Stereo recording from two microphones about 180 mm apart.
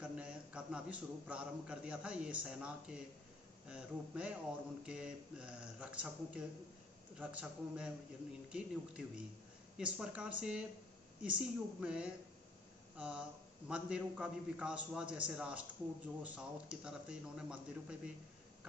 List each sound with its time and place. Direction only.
0.0 s a man's voice: 5° right (ahead or behind)